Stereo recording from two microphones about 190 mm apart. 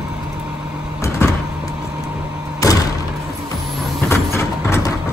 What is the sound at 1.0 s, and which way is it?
Vehicle, 15° left (ahead or behind).